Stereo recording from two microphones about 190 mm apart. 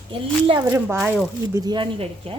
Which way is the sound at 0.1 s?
25° right (ahead or behind).